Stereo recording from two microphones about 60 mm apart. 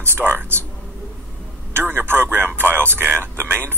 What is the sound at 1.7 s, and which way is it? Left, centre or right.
A man's voice, right.